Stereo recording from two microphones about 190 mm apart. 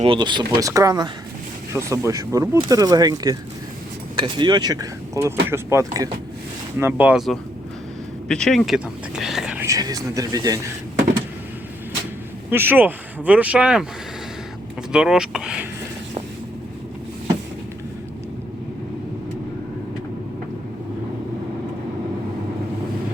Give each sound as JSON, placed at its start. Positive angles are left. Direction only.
{"t": 0.0, "sound": "speech", "side_deg": -25}
{"t": 9.6, "sound": "speech", "side_deg": -20}
{"t": 12.5, "sound": "speech", "side_deg": -10}
{"t": 14.9, "sound": "speech", "side_deg": -5}